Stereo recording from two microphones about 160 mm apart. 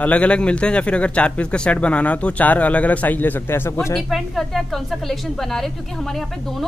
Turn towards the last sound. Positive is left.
turn(degrees=0)  # may be behind; listen again after turning